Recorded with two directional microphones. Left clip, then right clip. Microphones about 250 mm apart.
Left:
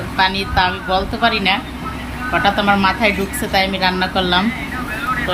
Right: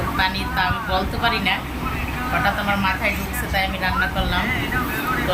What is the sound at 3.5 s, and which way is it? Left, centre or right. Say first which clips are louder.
Speech: left 6 dB; left.